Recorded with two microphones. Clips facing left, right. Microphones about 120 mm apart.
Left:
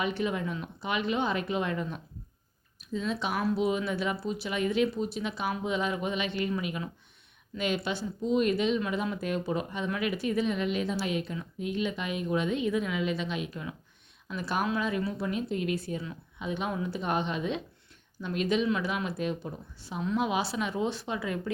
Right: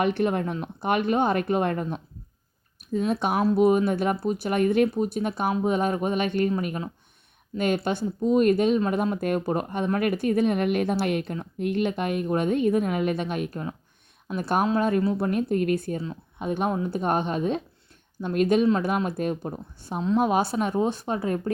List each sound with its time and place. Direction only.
0.0 s speech: 55° right (ahead or behind)
20.0 s a woman's voice: 30° right (ahead or behind)
20.2 s speech: 50° right (ahead or behind)